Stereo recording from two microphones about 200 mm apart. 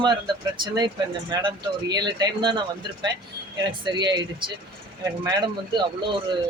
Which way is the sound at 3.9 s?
20° right (ahead or behind).